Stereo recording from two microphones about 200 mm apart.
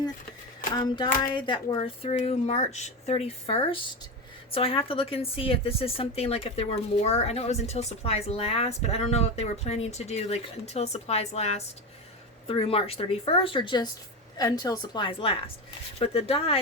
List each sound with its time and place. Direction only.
0.8 s a woman's voice: 20° left (ahead or behind)